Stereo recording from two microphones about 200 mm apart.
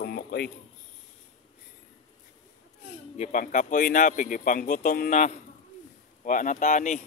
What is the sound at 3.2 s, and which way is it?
Speech, 40° left (ahead or behind).